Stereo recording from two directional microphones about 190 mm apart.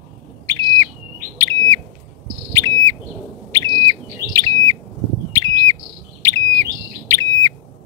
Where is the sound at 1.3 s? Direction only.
15° left (ahead or behind).